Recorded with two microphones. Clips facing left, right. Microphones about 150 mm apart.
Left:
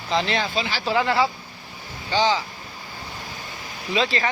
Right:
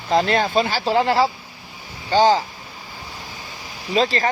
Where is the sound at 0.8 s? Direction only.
35° right (ahead or behind).